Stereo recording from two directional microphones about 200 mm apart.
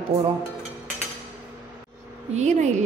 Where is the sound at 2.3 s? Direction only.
35° right (ahead or behind).